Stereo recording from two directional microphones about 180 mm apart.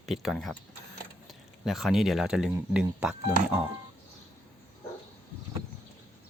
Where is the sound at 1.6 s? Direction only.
Centre (ahead or behind).